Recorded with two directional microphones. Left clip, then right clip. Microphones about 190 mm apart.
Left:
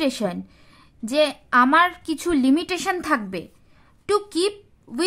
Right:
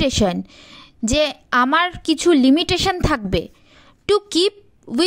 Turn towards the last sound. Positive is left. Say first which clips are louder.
# right 8 dB
turn(degrees=-30)  # may be behind; listen again after turning